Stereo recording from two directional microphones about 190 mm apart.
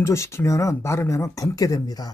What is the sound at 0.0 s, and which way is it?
Speech, 15° left (ahead or behind).